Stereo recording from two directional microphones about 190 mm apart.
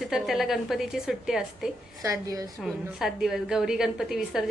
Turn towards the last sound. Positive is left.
turn(degrees=0)  # may be behind; listen again after turning